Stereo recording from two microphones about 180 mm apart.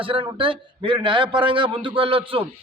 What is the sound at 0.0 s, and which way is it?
A man's voice, 30° right (ahead or behind).